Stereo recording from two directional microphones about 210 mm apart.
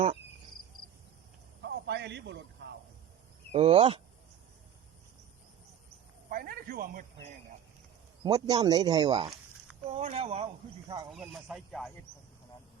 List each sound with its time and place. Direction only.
1.6 s a sound: 55° right (ahead or behind)
2.6 s cricket: 55° right (ahead or behind)
3.5 s speech: 30° right (ahead or behind)
6.2 s a sound: 40° right (ahead or behind)
8.2 s speech: 20° right (ahead or behind)
9.8 s speech: 30° right (ahead or behind)
11.1 s speech: centre (ahead or behind)